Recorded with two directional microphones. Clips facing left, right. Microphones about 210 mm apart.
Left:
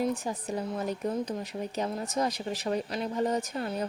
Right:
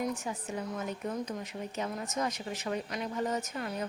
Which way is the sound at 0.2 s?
35° left (ahead or behind).